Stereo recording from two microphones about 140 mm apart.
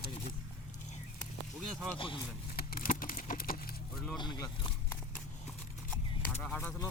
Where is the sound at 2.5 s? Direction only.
90° left.